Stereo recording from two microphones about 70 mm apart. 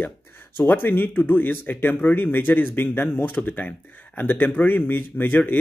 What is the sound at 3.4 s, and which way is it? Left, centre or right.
A man's voice, left.